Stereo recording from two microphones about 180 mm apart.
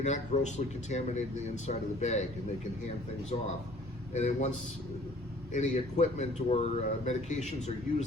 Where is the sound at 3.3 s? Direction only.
40° left (ahead or behind).